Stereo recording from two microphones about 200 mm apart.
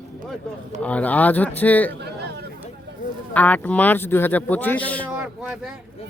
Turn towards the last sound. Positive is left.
turn(degrees=-5)  # may be behind; listen again after turning